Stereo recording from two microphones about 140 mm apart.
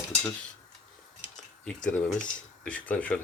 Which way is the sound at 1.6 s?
5° left (ahead or behind).